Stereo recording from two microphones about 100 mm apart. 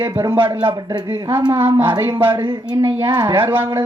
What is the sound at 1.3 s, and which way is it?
Speech, 45° right (ahead or behind).